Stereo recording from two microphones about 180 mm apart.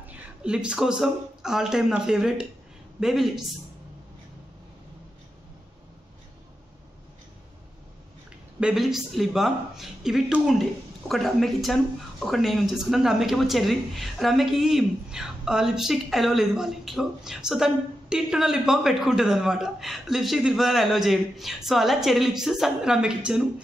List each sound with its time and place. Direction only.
0.0 s speech: 5° right (ahead or behind)
8.5 s speech: 5° right (ahead or behind)